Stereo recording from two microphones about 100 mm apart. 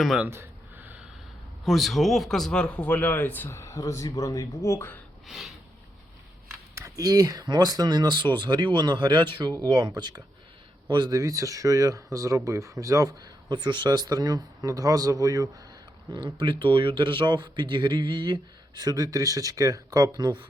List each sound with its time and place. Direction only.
0.3 s a sound: 20° right (ahead or behind)
1.6 s a man's voice: centre (ahead or behind); by 3.6 s 20° left (ahead or behind)
3.6 s speech: 30° left (ahead or behind)
5.2 s snort: centre (ahead or behind)
6.7 s speech: 35° right (ahead or behind)
11.2 s speech: 35° right (ahead or behind)
16.1 s speech: 50° right (ahead or behind)